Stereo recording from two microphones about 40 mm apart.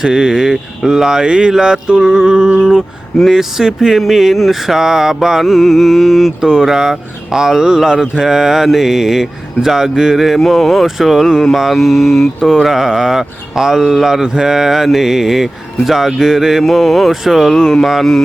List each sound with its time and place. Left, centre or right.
0.0 s speech: centre
3.9 s speech: centre
6.4 s speech: centre